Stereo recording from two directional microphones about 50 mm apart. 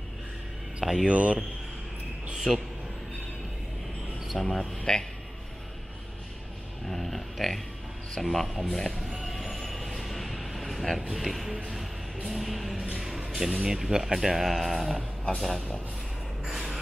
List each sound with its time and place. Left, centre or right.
1.0 s speech: right
2.3 s a man's voice: centre
4.3 s speech: centre
6.9 s speech: centre
9.2 s a sound: centre
11.1 s speech: centre
13.5 s speech: centre
13.7 s speech: centre
16.4 s a sound: centre